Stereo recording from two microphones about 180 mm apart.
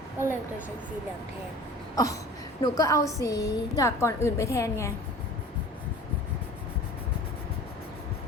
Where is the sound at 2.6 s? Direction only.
20° left (ahead or behind).